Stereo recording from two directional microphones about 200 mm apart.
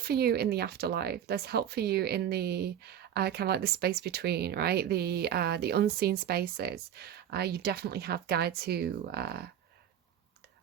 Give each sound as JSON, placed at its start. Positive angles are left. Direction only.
{"t": 0.0, "sound": "speech", "side_deg": -50}